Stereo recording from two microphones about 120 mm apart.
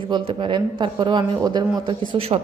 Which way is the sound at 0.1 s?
45° right (ahead or behind).